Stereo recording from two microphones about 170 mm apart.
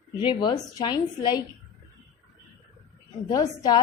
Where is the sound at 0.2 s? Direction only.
25° left (ahead or behind).